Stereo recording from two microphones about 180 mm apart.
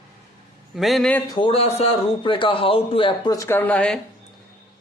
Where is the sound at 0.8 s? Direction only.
Centre (ahead or behind).